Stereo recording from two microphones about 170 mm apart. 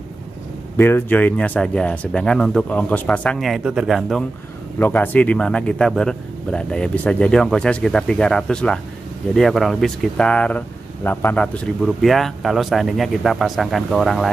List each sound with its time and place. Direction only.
0.7 s a man's voice: 10° left (ahead or behind)
4.7 s a man's voice: 10° left (ahead or behind)